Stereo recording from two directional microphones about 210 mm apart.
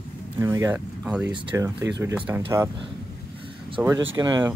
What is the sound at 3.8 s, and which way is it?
Speech, 10° right (ahead or behind).